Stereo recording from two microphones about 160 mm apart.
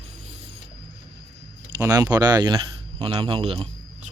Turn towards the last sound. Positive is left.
turn(degrees=-35)  # may be behind; listen again after turning